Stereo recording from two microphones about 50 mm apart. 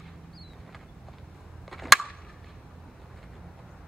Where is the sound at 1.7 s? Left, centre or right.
Centre.